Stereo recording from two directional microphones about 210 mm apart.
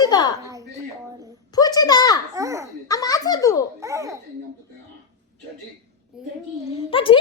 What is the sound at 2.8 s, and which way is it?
Speech, 15° left (ahead or behind).